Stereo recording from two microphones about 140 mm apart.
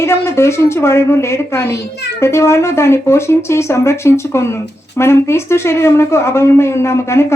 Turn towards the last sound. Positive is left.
turn(degrees=20)  # may be behind; listen again after turning